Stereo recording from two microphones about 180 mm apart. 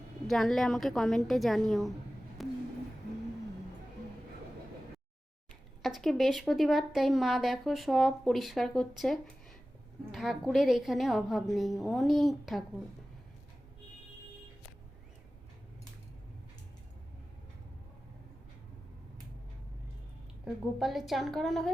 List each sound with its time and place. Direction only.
0.3 s a woman's voice: centre (ahead or behind)
2.4 s a sound: centre (ahead or behind)
5.8 s a woman's voice: centre (ahead or behind)
20.4 s a woman's voice: centre (ahead or behind)